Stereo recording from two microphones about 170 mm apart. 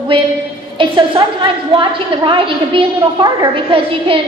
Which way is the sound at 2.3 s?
30° right (ahead or behind).